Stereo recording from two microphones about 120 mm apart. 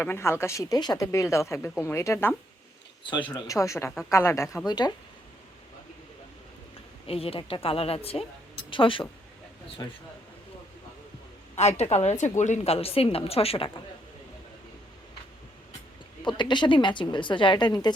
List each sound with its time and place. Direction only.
0.0 s speech: 20° left (ahead or behind)
3.0 s a woman's voice: 45° left (ahead or behind)
3.4 s speech: 25° left (ahead or behind)
4.6 s a woman's voice: 35° left (ahead or behind)
7.1 s a woman's voice: 50° left (ahead or behind)
9.8 s a woman's voice: 30° left (ahead or behind)
11.5 s a woman's voice: 65° left (ahead or behind); by 12.7 s 85° left
12.7 s a woman's voice: 55° left (ahead or behind)
16.2 s a woman's voice: 40° left (ahead or behind)